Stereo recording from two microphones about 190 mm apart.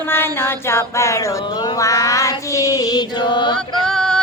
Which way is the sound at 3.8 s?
Centre (ahead or behind).